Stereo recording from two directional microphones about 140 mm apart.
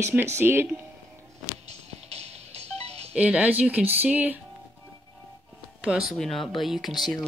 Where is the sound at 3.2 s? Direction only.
10° right (ahead or behind).